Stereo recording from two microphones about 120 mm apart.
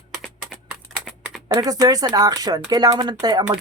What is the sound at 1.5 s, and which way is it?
Speech, 30° right (ahead or behind).